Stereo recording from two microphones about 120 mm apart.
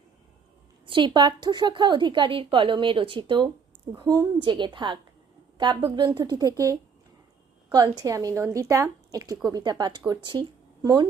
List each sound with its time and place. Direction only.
0.9 s a woman's voice: 40° right (ahead or behind)